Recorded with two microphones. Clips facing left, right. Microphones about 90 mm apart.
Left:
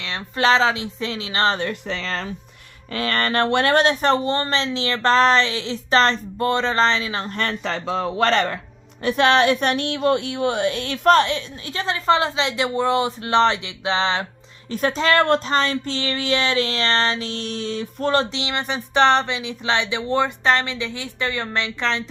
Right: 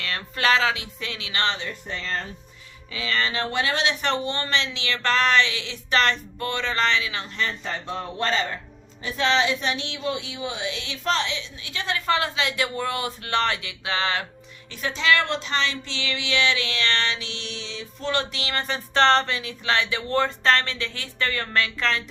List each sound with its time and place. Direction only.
0.0 s speech: 25° left (ahead or behind)
1.9 s speech: 90° left
2.9 s speech: 55° left (ahead or behind)
4.0 s speech: 35° left (ahead or behind)
7.3 s speech: 55° left (ahead or behind)
7.6 s speech: 90° left
9.0 s a woman's voice: 60° left (ahead or behind); by 14.3 s 25° left (ahead or behind)
14.7 s speech: 40° left (ahead or behind)
18.3 s speech: 20° left (ahead or behind)